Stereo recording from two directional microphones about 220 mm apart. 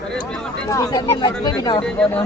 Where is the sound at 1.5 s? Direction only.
20° left (ahead or behind).